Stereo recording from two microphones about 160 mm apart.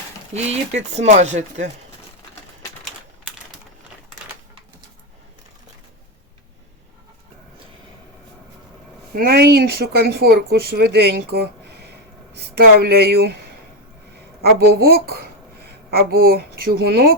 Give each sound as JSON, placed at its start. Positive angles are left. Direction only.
{"t": 0.3, "sound": "speech", "side_deg": -45}
{"t": 9.1, "sound": "speech", "side_deg": -70}
{"t": 12.5, "sound": "speech", "side_deg": -75}
{"t": 14.4, "sound": "speech", "side_deg": -75}
{"t": 15.6, "sound": "a sound", "side_deg": -80}